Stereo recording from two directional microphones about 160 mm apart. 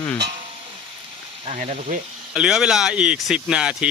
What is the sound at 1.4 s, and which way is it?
Speech, 45° right (ahead or behind).